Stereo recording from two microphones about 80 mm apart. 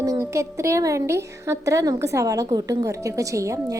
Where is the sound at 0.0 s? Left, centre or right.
Right.